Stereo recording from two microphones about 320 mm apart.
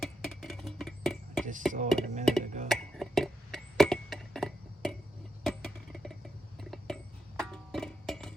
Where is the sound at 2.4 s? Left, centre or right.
Right.